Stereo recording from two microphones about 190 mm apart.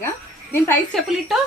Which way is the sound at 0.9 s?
Centre (ahead or behind).